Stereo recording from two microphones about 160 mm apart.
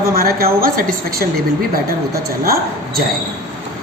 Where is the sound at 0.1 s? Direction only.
65° right (ahead or behind).